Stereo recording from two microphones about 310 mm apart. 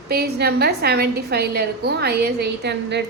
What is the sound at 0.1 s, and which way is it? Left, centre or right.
A woman's voice, right.